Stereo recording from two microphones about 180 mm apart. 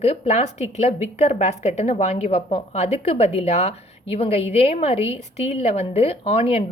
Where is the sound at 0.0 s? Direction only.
35° left (ahead or behind).